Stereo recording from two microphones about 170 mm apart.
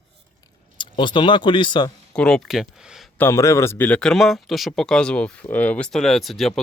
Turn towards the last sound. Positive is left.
turn(degrees=0)  # may be behind; listen again after turning